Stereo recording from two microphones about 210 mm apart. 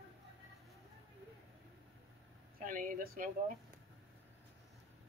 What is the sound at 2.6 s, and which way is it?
Speech, 40° right (ahead or behind).